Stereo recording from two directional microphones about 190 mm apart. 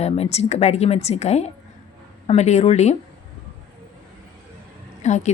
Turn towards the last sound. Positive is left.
turn(degrees=40)  # may be behind; listen again after turning